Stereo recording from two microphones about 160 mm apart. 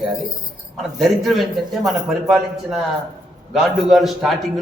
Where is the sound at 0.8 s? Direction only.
Centre (ahead or behind).